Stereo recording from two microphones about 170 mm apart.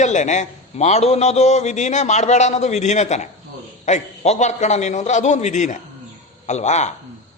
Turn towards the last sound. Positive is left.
turn(degrees=40)  # may be behind; listen again after turning